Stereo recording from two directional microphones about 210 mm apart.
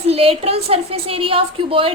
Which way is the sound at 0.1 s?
30° right (ahead or behind).